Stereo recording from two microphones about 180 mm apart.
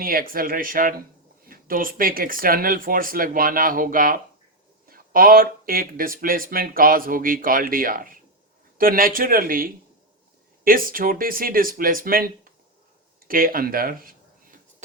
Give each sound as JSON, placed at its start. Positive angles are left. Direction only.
{"t": 0.0, "sound": "speech", "side_deg": -55}